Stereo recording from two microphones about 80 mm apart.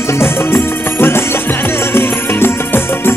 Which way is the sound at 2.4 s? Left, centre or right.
Left.